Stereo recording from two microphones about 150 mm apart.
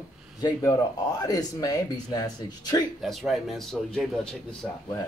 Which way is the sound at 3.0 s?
Centre (ahead or behind).